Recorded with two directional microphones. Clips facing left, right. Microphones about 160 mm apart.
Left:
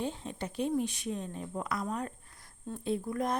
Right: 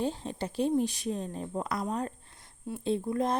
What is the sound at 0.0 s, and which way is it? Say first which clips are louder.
Speech: right 4 dB; 35° right (ahead or behind).